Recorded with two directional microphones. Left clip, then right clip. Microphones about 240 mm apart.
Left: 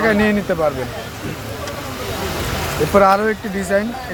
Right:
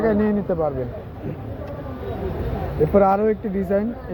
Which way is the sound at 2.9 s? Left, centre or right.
Centre.